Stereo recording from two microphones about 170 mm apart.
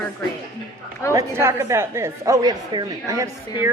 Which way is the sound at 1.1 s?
15° right (ahead or behind).